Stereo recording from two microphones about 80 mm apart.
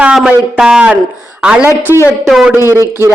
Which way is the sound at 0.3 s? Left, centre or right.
Centre.